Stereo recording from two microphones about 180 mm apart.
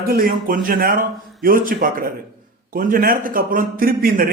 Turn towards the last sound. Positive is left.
turn(degrees=-55)  # may be behind; listen again after turning